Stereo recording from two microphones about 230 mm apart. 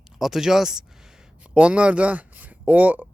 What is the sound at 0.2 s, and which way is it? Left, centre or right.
Speech, centre.